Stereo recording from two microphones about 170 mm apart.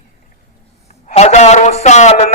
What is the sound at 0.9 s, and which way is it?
A man's voice, 40° left (ahead or behind).